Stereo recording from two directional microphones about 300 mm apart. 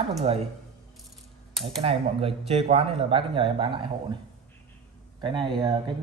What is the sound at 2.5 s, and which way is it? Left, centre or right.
Speech, centre.